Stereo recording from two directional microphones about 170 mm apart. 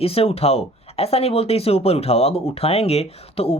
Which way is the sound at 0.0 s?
35° left (ahead or behind).